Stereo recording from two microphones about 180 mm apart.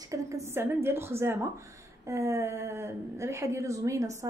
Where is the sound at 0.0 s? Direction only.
15° right (ahead or behind).